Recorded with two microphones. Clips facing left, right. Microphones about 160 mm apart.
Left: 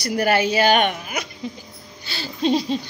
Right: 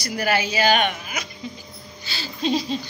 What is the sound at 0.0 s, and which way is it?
A woman's voice, 50° left (ahead or behind).